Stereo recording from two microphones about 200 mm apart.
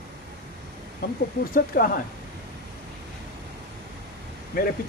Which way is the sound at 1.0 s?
50° left (ahead or behind).